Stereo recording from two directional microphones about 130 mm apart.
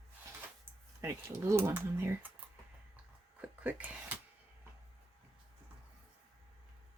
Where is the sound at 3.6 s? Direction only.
10° right (ahead or behind).